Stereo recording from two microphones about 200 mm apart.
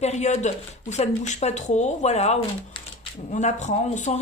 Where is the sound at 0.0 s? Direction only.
35° left (ahead or behind).